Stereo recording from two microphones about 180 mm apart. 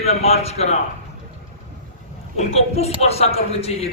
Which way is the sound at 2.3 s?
35° left (ahead or behind).